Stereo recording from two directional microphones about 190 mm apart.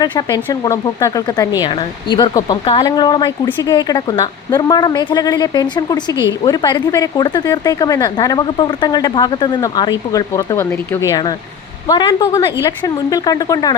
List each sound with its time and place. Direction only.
0.0 s speech: 20° left (ahead or behind)